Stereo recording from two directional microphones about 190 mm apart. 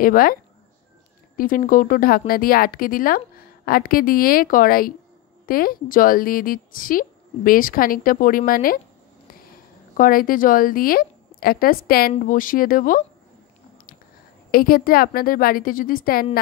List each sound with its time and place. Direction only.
0.0 s a woman's voice: 50° left (ahead or behind)
9.9 s a woman's voice: 45° left (ahead or behind)
14.5 s a woman's voice: 50° left (ahead or behind)